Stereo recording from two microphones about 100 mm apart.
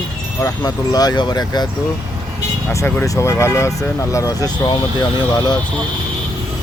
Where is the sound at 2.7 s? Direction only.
30° left (ahead or behind).